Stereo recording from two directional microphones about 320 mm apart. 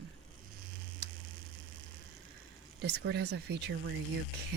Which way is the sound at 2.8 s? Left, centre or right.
Right.